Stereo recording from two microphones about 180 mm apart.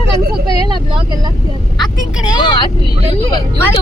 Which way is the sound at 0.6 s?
25° right (ahead or behind).